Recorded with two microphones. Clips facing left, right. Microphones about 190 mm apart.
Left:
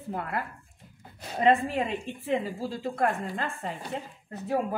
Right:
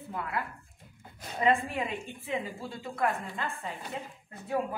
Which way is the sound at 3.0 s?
45° left (ahead or behind).